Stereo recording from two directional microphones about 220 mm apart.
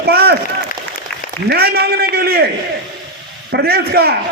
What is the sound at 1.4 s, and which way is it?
A man's voice, 45° right (ahead or behind).